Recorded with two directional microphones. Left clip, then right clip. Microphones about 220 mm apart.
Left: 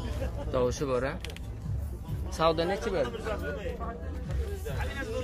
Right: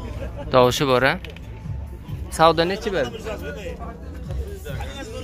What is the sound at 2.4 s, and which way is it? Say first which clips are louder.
Speech: right 10 dB; 35° right (ahead or behind).